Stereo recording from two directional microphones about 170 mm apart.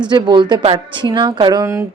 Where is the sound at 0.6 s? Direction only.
40° right (ahead or behind).